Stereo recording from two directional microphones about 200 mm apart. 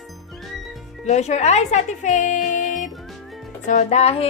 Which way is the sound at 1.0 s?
35° left (ahead or behind).